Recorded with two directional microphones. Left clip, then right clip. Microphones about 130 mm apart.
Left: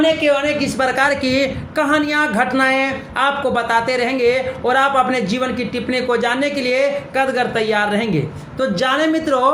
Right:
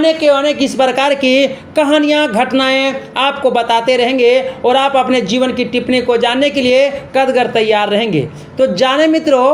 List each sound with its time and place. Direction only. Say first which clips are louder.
0.0 s a woman's voice: right 4 dB; 45° right (ahead or behind)
0.9 s a woman's voice: right 5 dB; 30° left (ahead or behind)
1.7 s music: right 5 dB; 25° right (ahead or behind)
2.1 s a woman's voice: right 4 dB; 30° right (ahead or behind)
3.5 s a woman's voice: right 5 dB; 25° right (ahead or behind)